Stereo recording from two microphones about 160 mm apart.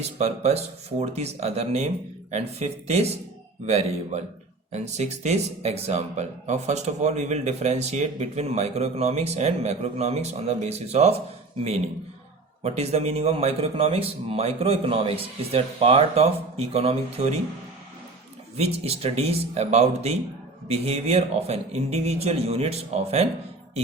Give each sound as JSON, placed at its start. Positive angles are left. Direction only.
{"t": 0.0, "sound": "a man's voice", "side_deg": -40}
{"t": 12.6, "sound": "a man's voice", "side_deg": -40}
{"t": 18.5, "sound": "a man's voice", "side_deg": -40}